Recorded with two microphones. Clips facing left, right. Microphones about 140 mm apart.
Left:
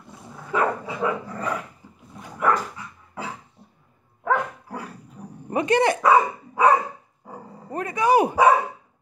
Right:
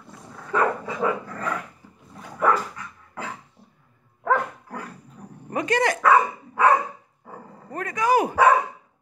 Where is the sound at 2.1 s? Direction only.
Centre (ahead or behind).